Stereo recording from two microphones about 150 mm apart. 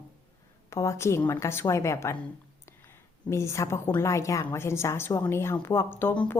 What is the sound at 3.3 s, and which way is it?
A woman's voice, 20° left (ahead or behind).